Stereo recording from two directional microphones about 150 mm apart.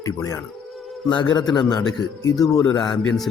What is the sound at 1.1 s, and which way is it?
Speech, 30° left (ahead or behind).